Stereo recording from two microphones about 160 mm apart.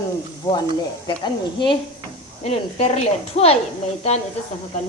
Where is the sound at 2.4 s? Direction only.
40° left (ahead or behind).